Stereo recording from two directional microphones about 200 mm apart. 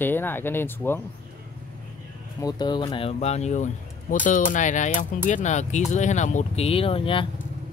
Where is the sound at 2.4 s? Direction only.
20° left (ahead or behind).